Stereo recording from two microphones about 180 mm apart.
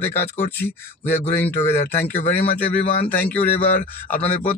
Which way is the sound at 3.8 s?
50° left (ahead or behind).